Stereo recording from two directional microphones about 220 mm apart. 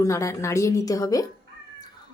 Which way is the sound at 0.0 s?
15° left (ahead or behind).